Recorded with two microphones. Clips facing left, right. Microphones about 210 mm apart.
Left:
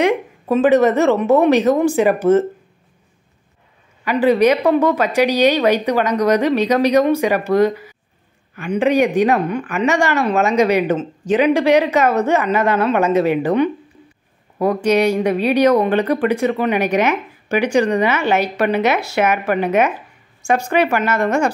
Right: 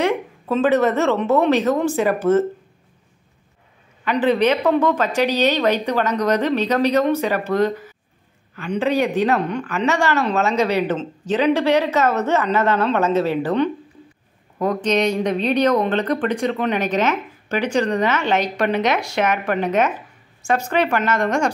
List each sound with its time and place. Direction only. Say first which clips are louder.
0.0 s speech: left 4 dB; 15° left (ahead or behind)
4.0 s speech: left 4 dB; 10° left (ahead or behind)